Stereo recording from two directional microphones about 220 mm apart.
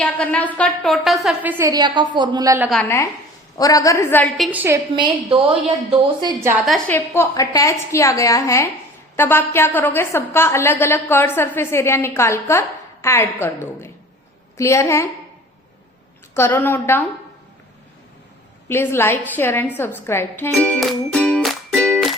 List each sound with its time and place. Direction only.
0.0 s a woman's voice: 5° left (ahead or behind); by 2.6 s 15° right (ahead or behind)
3.6 s a woman's voice: 15° left (ahead or behind)
4.5 s a woman's voice: 10° right (ahead or behind)
4.9 s a woman's voice: 20° right (ahead or behind)
6.7 s a woman's voice: 5° left (ahead or behind)
16.3 s a woman's voice: 10° left (ahead or behind)
18.7 s a woman's voice: 10° left (ahead or behind)
19.7 s music: 10° left (ahead or behind)